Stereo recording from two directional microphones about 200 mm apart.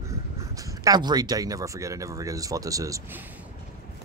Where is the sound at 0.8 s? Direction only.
20° right (ahead or behind).